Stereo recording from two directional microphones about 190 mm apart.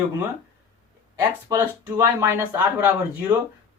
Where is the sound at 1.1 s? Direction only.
15° right (ahead or behind).